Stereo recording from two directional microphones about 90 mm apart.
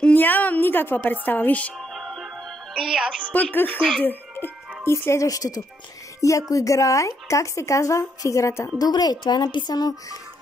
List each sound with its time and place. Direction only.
0.0 s a woman's voice: 20° left (ahead or behind)
1.8 s music: centre (ahead or behind)
2.8 s a woman's voice: 5° right (ahead or behind)
3.5 s speech: 15° left (ahead or behind); by 10.1 s 45° left (ahead or behind)